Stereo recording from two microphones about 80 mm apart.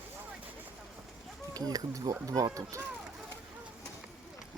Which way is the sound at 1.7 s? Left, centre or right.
Right.